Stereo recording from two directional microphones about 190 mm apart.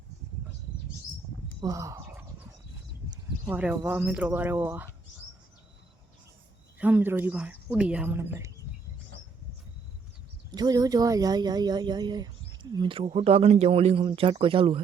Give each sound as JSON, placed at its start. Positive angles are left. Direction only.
{"t": 1.6, "sound": "speech", "side_deg": -15}
{"t": 6.7, "sound": "a woman's voice", "side_deg": -10}
{"t": 10.5, "sound": "speech", "side_deg": -20}